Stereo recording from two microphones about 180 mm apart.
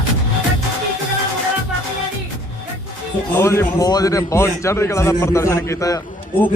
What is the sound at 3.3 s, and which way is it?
A man's voice, 15° left (ahead or behind).